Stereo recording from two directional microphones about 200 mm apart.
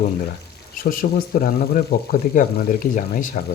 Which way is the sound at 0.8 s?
45° left (ahead or behind).